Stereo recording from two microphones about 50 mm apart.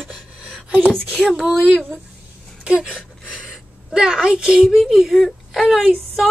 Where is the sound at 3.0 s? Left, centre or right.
Centre.